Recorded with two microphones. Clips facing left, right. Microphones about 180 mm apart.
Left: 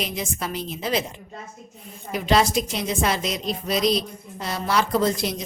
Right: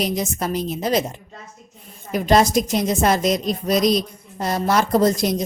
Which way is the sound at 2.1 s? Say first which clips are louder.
Right 4 dB; 45° right (ahead or behind).